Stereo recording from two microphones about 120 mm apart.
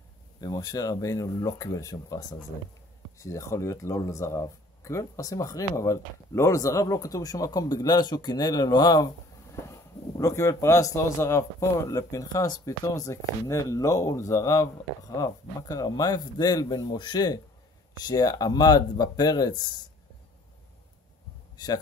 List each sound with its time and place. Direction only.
0.4 s speech: 35° left (ahead or behind)